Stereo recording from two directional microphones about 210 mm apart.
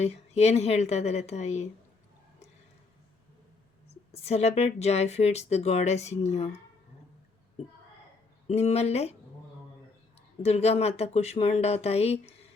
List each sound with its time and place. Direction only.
0.0 s speech: 30° left (ahead or behind)
3.8 s speech: 30° left (ahead or behind)
8.4 s speech: 30° left (ahead or behind)
10.4 s speech: 30° left (ahead or behind)